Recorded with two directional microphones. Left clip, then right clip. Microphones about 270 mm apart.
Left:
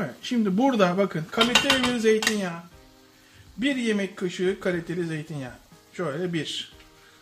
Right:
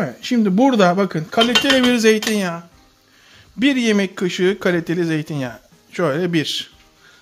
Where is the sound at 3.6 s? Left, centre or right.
Right.